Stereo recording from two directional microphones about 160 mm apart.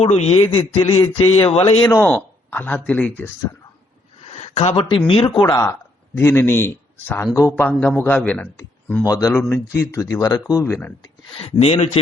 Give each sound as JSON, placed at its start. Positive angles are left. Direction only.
{"t": 0.0, "sound": "speech", "side_deg": 40}
{"t": 1.9, "sound": "speech", "side_deg": 10}
{"t": 4.3, "sound": "speech", "side_deg": 40}
{"t": 9.0, "sound": "speech", "side_deg": 20}
{"t": 9.3, "sound": "speech", "side_deg": 5}
{"t": 9.8, "sound": "speech", "side_deg": 20}
{"t": 11.0, "sound": "speech", "side_deg": 35}